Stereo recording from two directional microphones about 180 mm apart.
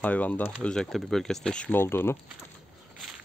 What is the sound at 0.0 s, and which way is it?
Speech, 10° left (ahead or behind).